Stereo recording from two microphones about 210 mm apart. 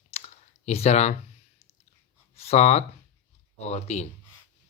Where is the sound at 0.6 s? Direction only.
30° left (ahead or behind).